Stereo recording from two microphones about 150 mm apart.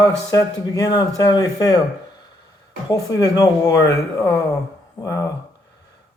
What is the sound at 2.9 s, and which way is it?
Speech, 25° left (ahead or behind).